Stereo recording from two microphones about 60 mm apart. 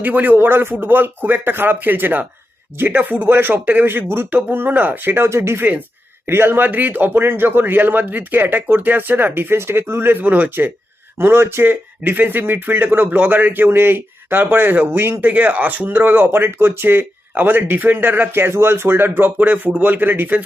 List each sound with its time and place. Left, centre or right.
0.0 s speech: right
11.2 s speech: right
15.2 s speech: right